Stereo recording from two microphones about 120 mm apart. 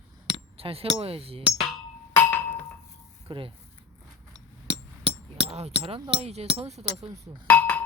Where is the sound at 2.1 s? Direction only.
15° left (ahead or behind).